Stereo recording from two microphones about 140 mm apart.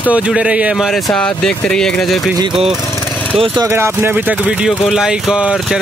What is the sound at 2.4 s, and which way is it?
Speech, 35° right (ahead or behind).